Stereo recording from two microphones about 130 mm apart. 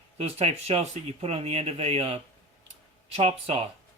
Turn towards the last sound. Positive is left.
turn(degrees=-45)  # may be behind; listen again after turning